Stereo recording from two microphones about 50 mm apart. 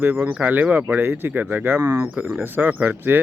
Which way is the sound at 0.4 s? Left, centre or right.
Right.